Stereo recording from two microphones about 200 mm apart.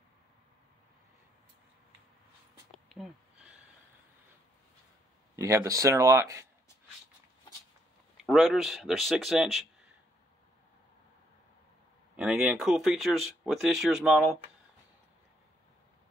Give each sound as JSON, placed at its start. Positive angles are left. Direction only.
{"t": 2.7, "sound": "a sound", "side_deg": 0}
{"t": 5.3, "sound": "speech", "side_deg": -15}
{"t": 8.2, "sound": "speech", "side_deg": 0}
{"t": 12.2, "sound": "speech", "side_deg": 0}